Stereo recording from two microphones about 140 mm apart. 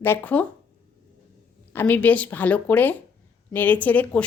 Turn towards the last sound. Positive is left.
turn(degrees=10)  # may be behind; listen again after turning